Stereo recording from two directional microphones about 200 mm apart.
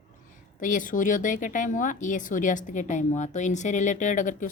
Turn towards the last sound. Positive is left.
turn(degrees=40)  # may be behind; listen again after turning